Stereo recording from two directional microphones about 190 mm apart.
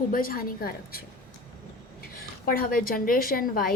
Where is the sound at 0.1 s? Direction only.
50° left (ahead or behind).